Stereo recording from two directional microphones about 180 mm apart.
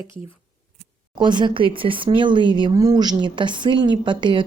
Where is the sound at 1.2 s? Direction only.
25° right (ahead or behind).